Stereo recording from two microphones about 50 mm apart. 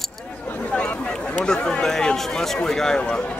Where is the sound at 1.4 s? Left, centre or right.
Centre.